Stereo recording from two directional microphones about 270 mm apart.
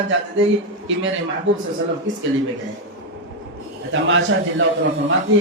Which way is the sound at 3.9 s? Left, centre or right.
Right.